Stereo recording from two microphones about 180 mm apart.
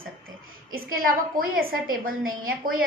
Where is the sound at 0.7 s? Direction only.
55° right (ahead or behind).